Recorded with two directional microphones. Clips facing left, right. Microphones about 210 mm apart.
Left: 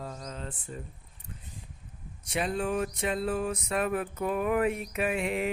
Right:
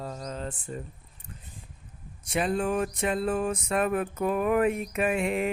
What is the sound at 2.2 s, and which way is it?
Mantra, 50° right (ahead or behind).